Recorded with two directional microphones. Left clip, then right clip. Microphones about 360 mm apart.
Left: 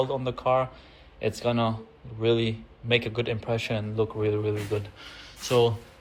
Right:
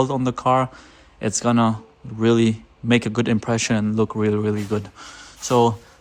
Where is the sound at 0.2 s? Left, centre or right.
Right.